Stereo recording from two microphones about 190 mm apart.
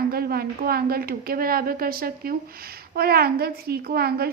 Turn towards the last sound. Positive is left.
turn(degrees=-55)  # may be behind; listen again after turning